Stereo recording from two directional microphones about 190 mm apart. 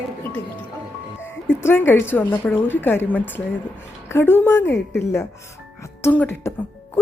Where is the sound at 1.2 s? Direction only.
10° left (ahead or behind).